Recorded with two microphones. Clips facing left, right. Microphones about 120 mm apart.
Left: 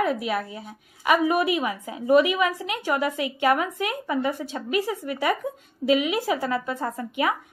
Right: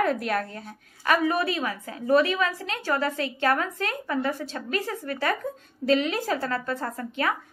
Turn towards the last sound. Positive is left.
turn(degrees=15)  # may be behind; listen again after turning